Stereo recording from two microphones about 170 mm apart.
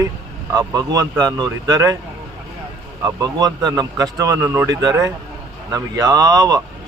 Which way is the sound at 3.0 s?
20° right (ahead or behind).